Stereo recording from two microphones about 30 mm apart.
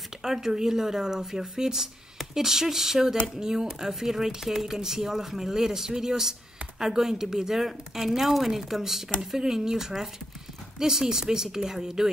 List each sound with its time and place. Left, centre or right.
0.2 s a woman's voice: centre